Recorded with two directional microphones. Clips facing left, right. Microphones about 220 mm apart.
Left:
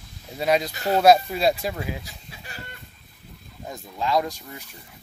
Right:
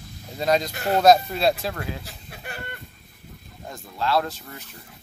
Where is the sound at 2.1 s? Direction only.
60° right (ahead or behind).